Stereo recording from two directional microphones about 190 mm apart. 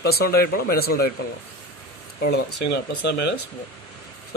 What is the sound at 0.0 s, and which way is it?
Speech, 55° left (ahead or behind).